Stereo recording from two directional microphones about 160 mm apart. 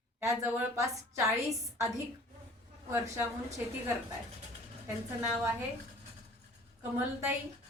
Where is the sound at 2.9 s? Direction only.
15° right (ahead or behind).